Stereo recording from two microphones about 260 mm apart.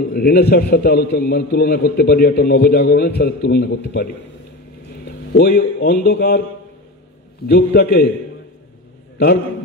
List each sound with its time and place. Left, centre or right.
0.1 s a man's voice: left
7.4 s a man's voice: left